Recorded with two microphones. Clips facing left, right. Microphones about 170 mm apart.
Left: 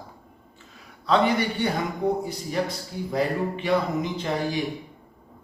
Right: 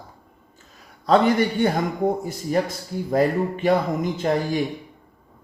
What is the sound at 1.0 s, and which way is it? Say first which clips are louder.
A man's voice: right 4 dB; 45° right (ahead or behind).